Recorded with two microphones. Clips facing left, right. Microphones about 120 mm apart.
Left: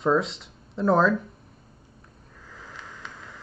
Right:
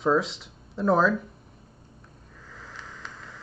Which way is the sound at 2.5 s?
Centre (ahead or behind).